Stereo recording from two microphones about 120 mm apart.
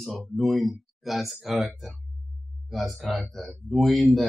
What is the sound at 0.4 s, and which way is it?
Speech, centre (ahead or behind).